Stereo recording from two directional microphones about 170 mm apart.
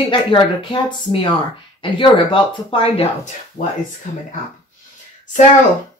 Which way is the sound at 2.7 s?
30° left (ahead or behind).